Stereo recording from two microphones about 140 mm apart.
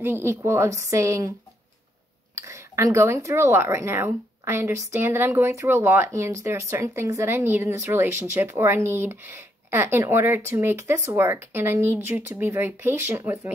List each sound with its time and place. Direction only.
0.0 s speech: 15° right (ahead or behind)
2.3 s speech: 20° right (ahead or behind)